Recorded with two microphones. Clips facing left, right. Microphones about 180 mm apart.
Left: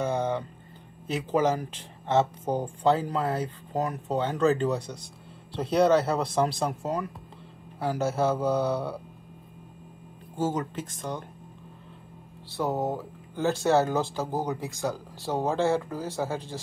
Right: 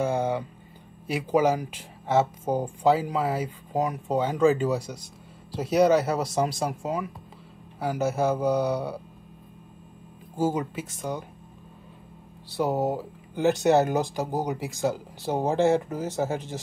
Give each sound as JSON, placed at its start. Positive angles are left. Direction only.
{"t": 0.0, "sound": "a sound", "side_deg": -10}
{"t": 1.0, "sound": "speech", "side_deg": -10}
{"t": 10.3, "sound": "speech", "side_deg": -10}
{"t": 12.5, "sound": "speech", "side_deg": -15}